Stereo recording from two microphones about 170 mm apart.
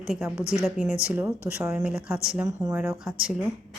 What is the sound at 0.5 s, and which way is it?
A woman's voice, 5° right (ahead or behind).